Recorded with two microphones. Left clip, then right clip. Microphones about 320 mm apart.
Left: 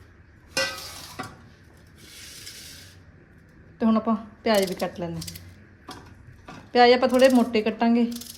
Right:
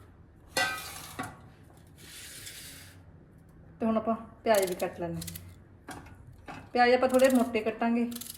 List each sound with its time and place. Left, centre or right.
3.8 s speech: left
6.7 s speech: left